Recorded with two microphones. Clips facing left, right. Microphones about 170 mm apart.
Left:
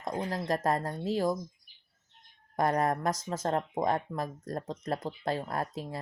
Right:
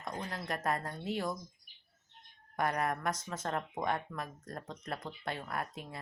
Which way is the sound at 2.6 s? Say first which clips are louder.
Left 6 dB; 35° left (ahead or behind).